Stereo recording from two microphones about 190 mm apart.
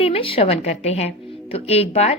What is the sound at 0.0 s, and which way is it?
A woman's voice, 30° left (ahead or behind).